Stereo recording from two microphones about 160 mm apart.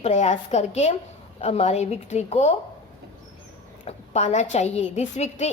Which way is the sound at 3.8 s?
45° left (ahead or behind).